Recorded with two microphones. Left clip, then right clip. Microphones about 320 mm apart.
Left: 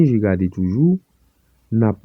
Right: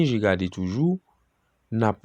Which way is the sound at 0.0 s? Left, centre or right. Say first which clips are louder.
Left 4 dB; centre.